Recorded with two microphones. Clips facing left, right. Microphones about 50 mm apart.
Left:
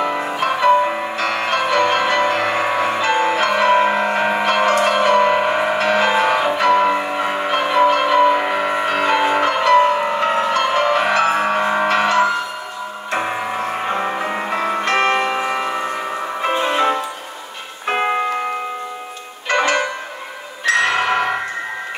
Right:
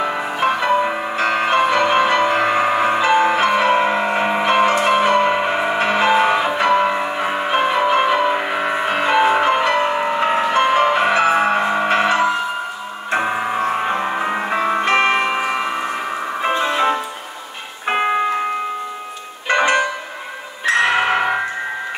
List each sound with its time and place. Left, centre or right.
0.0 s music: centre
3.6 s music: centre
6.8 s music: centre
10.5 s music: centre
11.9 s music: centre
16.5 s music: centre
17.8 s music: centre
19.4 s music: centre